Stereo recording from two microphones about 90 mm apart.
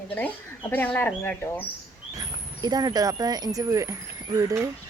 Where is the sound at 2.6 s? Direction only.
45° right (ahead or behind).